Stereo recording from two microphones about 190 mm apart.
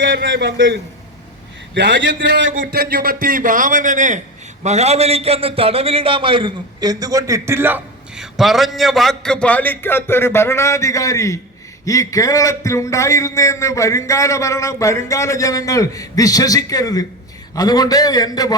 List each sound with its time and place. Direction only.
0.0 s a man's voice: 70° right (ahead or behind)
2.6 s a man's voice: 55° right (ahead or behind); by 18.5 s 20° left (ahead or behind)